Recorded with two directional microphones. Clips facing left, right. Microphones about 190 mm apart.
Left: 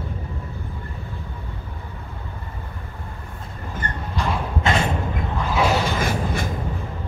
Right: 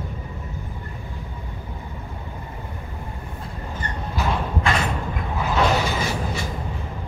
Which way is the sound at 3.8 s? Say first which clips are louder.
Left 2 dB; 55° left (ahead or behind).